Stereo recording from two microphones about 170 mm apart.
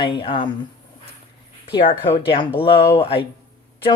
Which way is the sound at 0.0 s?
30° left (ahead or behind).